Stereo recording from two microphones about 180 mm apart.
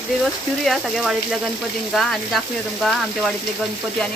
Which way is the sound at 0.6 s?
Centre (ahead or behind).